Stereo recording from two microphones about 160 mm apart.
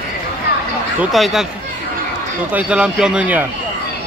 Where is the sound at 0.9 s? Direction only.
Centre (ahead or behind).